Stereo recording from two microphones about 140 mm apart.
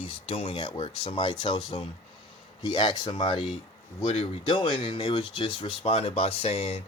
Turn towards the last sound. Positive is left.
turn(degrees=45)  # may be behind; listen again after turning